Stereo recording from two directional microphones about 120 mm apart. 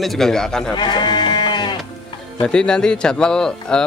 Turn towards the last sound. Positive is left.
turn(degrees=5)  # may be behind; listen again after turning